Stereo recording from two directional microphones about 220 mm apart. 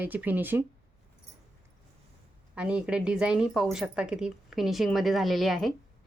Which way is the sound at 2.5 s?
5° right (ahead or behind).